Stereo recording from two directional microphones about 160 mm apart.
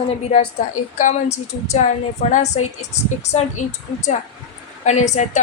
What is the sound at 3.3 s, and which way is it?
A woman's voice, 45° left (ahead or behind).